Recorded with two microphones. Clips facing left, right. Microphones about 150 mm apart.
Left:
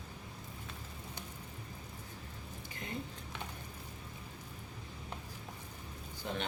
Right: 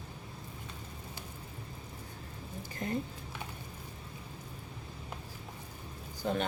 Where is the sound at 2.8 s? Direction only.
45° right (ahead or behind).